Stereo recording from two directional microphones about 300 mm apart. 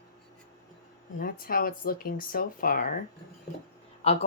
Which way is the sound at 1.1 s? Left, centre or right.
Left.